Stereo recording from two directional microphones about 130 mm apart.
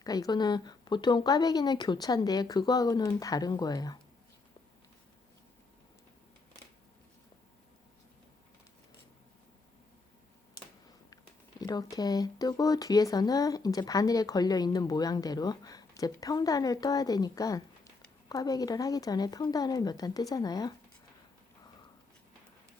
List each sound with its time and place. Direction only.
0.0 s speech: 30° left (ahead or behind)
11.6 s speech: 30° left (ahead or behind)